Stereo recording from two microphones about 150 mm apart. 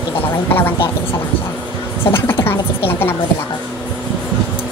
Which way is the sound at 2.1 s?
15° left (ahead or behind).